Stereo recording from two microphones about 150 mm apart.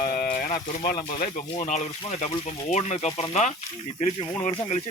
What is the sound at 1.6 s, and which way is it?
Speech, 50° left (ahead or behind).